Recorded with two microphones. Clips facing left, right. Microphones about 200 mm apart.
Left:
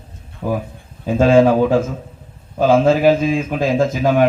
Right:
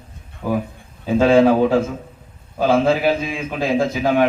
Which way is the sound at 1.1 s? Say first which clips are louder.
Left 1 dB; 50° left (ahead or behind).